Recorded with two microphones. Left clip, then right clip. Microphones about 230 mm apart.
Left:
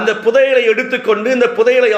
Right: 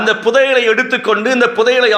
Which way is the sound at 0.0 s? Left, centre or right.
Right.